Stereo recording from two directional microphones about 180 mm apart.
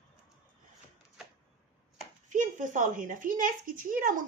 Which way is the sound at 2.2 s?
45° right (ahead or behind).